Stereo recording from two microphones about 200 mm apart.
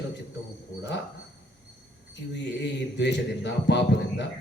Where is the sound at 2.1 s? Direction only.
60° left (ahead or behind).